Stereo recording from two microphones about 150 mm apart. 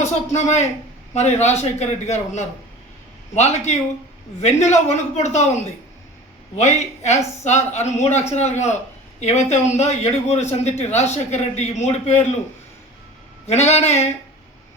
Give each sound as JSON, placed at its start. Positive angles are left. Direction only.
{"t": 0.0, "sound": "a man's voice", "side_deg": 50}
{"t": 6.6, "sound": "a man's voice", "side_deg": 50}
{"t": 13.5, "sound": "a man's voice", "side_deg": 45}